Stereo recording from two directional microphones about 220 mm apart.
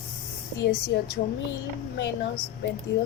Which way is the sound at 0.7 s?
45° left (ahead or behind).